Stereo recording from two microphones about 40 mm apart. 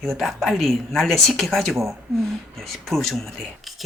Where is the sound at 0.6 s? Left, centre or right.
Centre.